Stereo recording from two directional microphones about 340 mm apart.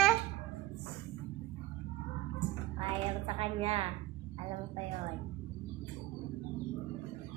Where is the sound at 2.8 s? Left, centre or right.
Centre.